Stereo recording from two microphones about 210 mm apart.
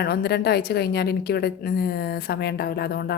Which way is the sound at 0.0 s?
50° left (ahead or behind).